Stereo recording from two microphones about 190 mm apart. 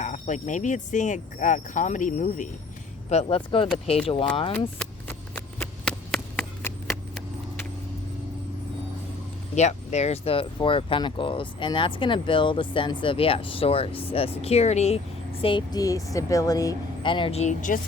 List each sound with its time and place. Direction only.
0.0 s jingle bell: 40° left (ahead or behind)
3.1 s speech: 30° left (ahead or behind)
4.8 s a sound: 5° left (ahead or behind)
9.6 s speech: 35° left (ahead or behind)